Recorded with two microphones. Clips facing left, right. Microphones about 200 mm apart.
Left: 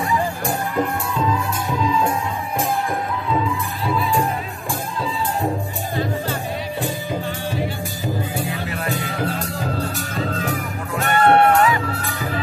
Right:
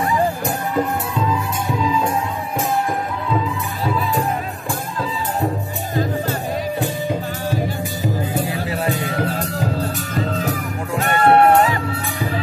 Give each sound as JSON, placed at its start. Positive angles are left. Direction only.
{"t": 11.1, "sound": "music", "side_deg": -30}